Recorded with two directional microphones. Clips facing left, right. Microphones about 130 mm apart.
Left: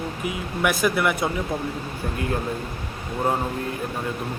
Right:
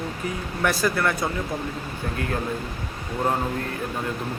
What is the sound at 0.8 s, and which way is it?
Speech, 10° left (ahead or behind).